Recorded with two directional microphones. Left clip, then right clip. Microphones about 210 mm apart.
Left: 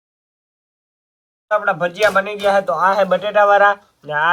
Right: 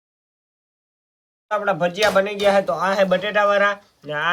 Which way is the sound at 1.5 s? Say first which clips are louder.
Left 3 dB; 10° right (ahead or behind).